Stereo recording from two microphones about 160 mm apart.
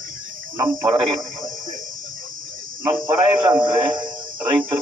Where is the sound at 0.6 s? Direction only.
20° right (ahead or behind).